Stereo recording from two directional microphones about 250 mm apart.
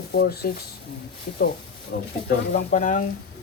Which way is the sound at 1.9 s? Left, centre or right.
Left.